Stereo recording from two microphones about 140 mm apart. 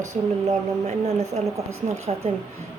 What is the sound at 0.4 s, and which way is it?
Speech, 50° right (ahead or behind).